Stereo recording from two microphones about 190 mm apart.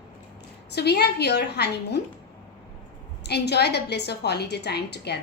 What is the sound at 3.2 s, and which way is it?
A woman's voice, 60° left (ahead or behind).